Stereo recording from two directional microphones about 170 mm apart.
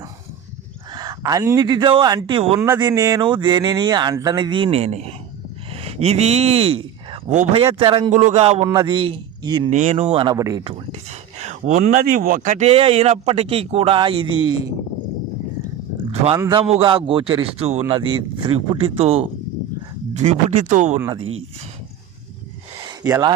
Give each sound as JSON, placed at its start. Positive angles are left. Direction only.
{"t": 0.9, "sound": "speech", "side_deg": -20}
{"t": 2.6, "sound": "speech", "side_deg": -10}
{"t": 8.6, "sound": "a man's voice", "side_deg": -20}
{"t": 9.6, "sound": "speech", "side_deg": -40}
{"t": 10.3, "sound": "speech", "side_deg": -20}
{"t": 16.4, "sound": "speech", "side_deg": -25}
{"t": 16.6, "sound": "speech", "side_deg": -35}
{"t": 22.8, "sound": "a sound", "side_deg": -25}